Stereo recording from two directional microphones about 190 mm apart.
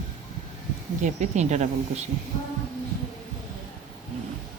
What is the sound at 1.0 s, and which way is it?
Speech, 35° right (ahead or behind).